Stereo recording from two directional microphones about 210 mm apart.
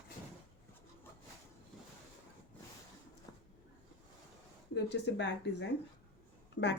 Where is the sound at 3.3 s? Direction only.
15° left (ahead or behind).